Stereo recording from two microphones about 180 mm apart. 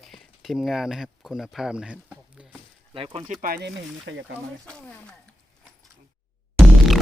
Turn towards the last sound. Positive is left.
turn(degrees=0)  # may be behind; listen again after turning